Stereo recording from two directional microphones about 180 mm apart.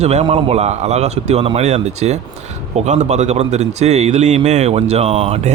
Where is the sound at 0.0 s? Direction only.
35° right (ahead or behind).